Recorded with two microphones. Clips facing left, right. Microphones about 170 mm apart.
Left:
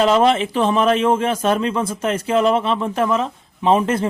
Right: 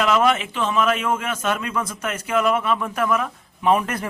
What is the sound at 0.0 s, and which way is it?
A man's voice, 30° left (ahead or behind).